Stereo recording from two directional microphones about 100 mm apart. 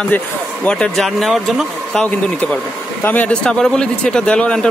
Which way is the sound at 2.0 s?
15° left (ahead or behind).